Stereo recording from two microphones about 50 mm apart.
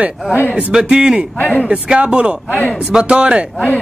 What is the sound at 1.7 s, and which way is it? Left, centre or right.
Speech, centre.